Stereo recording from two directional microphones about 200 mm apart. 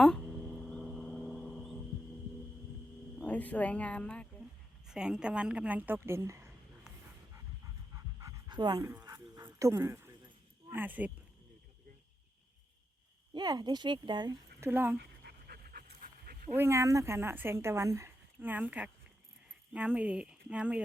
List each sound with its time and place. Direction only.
0.7 s vehicle: centre (ahead or behind)
3.2 s speech: 5° left (ahead or behind); by 6.5 s 15° right (ahead or behind)
7.9 s pant: 15° right (ahead or behind)
10.7 s speech: 10° right (ahead or behind)
13.3 s speech: 20° right (ahead or behind)
14.6 s speech: 10° right (ahead or behind)
14.9 s dog: 50° right (ahead or behind)
16.6 s speech: 15° right (ahead or behind)